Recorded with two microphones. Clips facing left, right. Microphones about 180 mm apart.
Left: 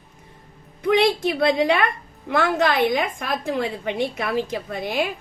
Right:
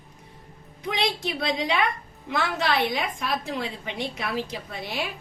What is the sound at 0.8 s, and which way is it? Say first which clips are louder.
A woman's voice: left 9 dB; 55° left (ahead or behind).